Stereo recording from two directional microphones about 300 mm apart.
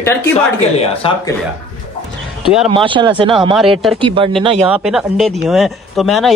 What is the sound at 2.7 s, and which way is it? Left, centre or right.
A man's voice, centre.